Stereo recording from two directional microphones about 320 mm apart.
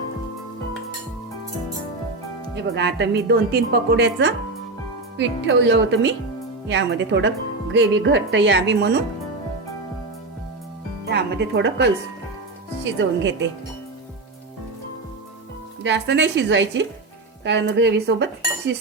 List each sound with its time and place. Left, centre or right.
2.6 s speech: right
11.0 s speech: right
15.8 s speech: right